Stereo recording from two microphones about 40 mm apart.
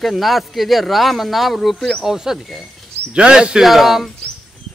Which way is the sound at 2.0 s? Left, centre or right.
Centre.